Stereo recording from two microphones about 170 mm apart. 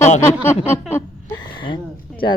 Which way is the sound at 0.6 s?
15° left (ahead or behind).